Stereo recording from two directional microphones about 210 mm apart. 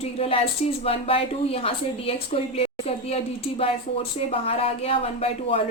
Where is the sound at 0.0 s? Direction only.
30° left (ahead or behind).